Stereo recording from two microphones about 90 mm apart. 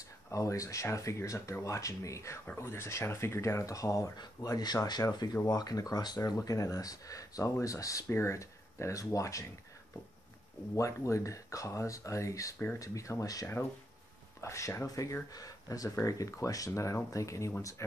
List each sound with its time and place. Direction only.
0.3 s speech: 35° left (ahead or behind)
10.8 s speech: 35° left (ahead or behind)